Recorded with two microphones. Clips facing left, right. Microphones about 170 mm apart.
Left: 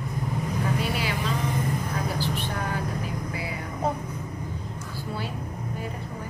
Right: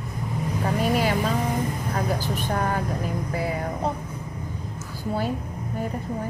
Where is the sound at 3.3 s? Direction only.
50° right (ahead or behind).